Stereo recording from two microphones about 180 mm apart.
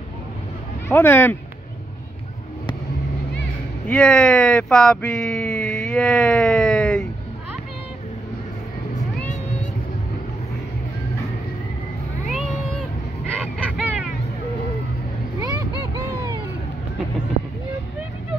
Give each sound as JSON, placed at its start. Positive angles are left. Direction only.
{"t": 0.8, "sound": "speech", "side_deg": 10}
{"t": 3.8, "sound": "speech", "side_deg": 5}
{"t": 13.6, "sound": "a sound", "side_deg": -5}
{"t": 15.4, "sound": "vehicle", "side_deg": -20}